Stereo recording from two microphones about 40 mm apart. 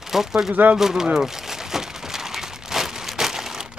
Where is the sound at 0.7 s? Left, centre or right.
Centre.